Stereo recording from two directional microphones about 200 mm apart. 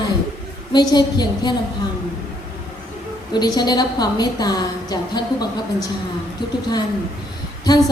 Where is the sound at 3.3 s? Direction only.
20° left (ahead or behind).